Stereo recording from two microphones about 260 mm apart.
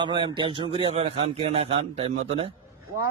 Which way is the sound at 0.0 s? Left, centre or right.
Centre.